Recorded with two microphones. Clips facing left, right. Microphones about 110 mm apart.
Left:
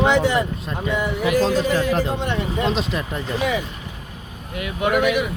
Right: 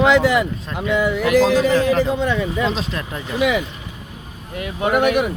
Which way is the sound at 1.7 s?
5° left (ahead or behind).